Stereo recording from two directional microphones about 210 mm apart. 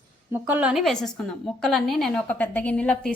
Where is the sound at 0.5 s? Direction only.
5° right (ahead or behind).